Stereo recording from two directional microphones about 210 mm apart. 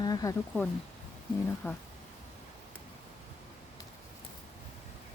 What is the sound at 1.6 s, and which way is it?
Speech, 10° left (ahead or behind).